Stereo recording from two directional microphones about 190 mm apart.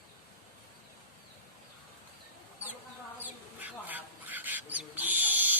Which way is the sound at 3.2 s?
10° right (ahead or behind).